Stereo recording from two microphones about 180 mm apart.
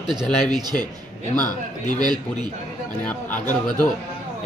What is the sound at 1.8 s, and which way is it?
Speech, 25° right (ahead or behind).